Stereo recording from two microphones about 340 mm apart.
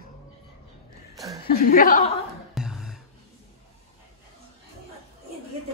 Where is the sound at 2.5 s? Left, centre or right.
Centre.